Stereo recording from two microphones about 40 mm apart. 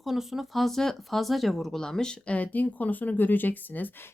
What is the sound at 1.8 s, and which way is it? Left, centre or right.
Speech, centre.